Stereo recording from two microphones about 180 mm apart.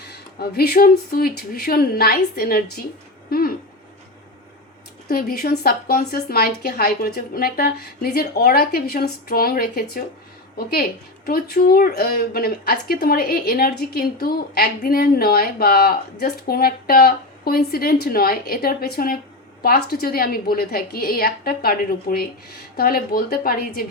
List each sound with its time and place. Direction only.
0.1 s a woman's voice: 60° left (ahead or behind)
3.2 s a sound: 55° left (ahead or behind)
5.0 s a woman's voice: 55° left (ahead or behind)
11.3 s a woman's voice: 55° left (ahead or behind)